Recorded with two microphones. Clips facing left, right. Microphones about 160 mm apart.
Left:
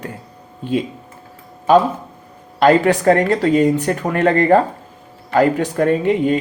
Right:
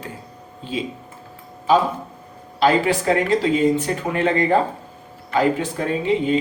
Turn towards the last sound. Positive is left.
turn(degrees=55)  # may be behind; listen again after turning